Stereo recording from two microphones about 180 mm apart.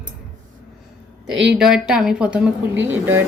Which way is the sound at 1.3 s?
80° right.